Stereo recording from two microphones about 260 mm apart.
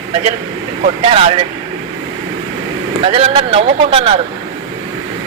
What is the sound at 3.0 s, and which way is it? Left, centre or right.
Speech, right.